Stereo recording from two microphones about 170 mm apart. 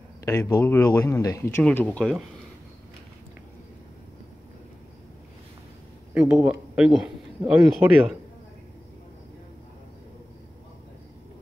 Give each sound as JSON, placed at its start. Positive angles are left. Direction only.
{"t": 0.2, "sound": "a man's voice", "side_deg": 20}
{"t": 6.1, "sound": "a man's voice", "side_deg": -10}